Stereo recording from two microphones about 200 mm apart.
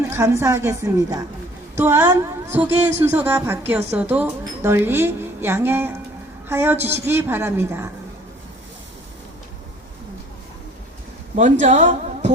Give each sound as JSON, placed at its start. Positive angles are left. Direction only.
{"t": 0.1, "sound": "a woman's voice", "side_deg": -15}
{"t": 11.6, "sound": "a woman's voice", "side_deg": -40}